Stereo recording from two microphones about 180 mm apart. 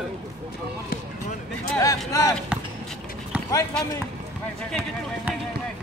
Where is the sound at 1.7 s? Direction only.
20° left (ahead or behind).